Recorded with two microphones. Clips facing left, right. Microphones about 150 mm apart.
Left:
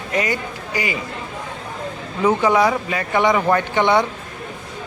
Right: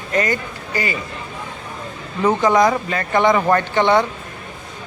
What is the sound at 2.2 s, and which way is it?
Speech, 10° left (ahead or behind).